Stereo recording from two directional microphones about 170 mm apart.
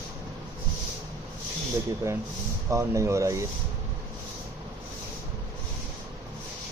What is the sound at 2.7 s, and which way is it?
Speech, 20° right (ahead or behind).